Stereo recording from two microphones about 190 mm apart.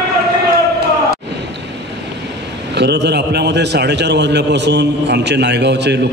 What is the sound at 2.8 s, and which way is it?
A man's voice, 60° right (ahead or behind).